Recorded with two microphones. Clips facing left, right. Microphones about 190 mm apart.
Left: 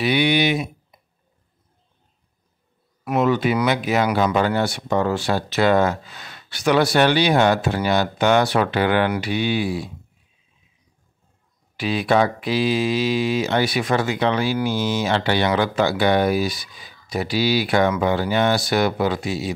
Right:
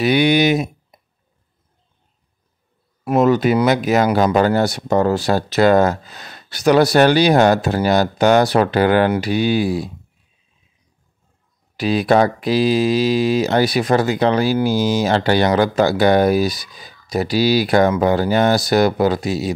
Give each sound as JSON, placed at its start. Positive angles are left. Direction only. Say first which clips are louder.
{"t": 0.0, "sound": "speech", "louder": "right 4 dB", "side_deg": -45}
{"t": 3.0, "sound": "speech", "louder": "right 5 dB", "side_deg": -35}
{"t": 11.7, "sound": "speech", "louder": "right 4 dB", "side_deg": -40}